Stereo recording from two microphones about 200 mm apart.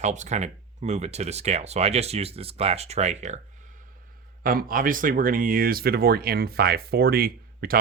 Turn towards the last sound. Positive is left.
turn(degrees=-50)  # may be behind; listen again after turning